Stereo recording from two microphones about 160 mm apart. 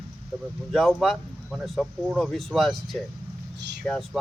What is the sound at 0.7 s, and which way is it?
Speech, centre (ahead or behind).